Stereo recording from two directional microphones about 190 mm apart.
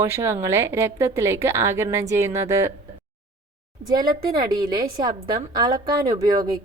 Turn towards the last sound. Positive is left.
turn(degrees=-20)  # may be behind; listen again after turning